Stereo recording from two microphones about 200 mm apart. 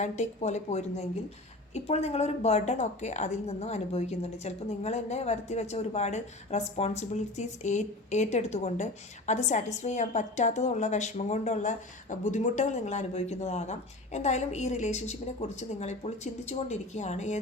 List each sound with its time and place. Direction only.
0.0 s a woman's voice: 35° left (ahead or behind)